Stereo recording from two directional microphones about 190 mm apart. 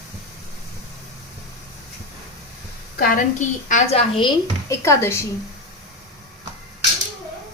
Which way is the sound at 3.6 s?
35° left (ahead or behind).